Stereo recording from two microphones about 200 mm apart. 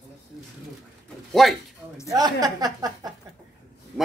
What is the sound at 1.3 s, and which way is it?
Speech, centre (ahead or behind).